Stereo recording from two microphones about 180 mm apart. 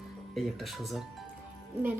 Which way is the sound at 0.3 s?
Centre (ahead or behind).